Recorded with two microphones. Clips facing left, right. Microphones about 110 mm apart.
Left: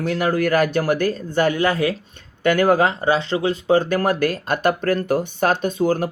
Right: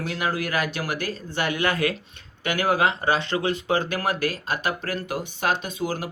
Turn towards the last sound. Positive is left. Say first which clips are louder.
# left 9 dB
turn(degrees=50)  # may be behind; listen again after turning